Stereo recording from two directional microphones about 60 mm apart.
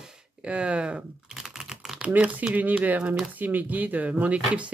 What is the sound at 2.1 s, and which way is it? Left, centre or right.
Speech, right.